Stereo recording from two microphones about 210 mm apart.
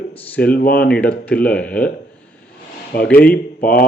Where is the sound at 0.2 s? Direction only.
5° left (ahead or behind).